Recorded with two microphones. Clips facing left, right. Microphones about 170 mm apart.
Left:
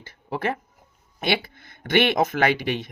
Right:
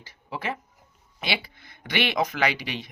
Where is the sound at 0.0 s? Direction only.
55° left (ahead or behind).